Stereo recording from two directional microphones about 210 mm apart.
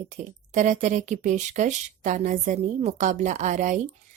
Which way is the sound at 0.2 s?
35° right (ahead or behind).